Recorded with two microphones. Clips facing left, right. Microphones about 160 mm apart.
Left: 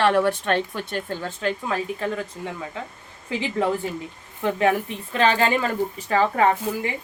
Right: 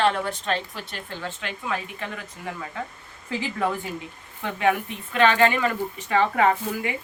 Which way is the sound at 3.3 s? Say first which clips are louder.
Left 4 dB; 20° left (ahead or behind).